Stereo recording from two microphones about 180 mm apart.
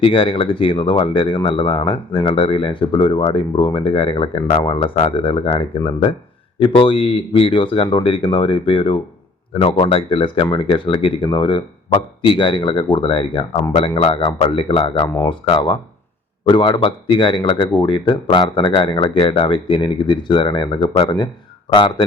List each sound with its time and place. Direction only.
0.0 s speech: 30° left (ahead or behind)